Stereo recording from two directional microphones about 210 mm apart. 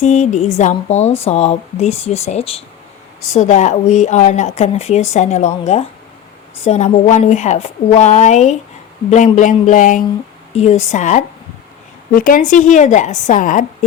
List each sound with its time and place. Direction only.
0.0 s speech: 35° left (ahead or behind)